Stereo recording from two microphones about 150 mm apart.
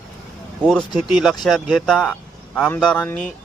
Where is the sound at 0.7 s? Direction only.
Centre (ahead or behind).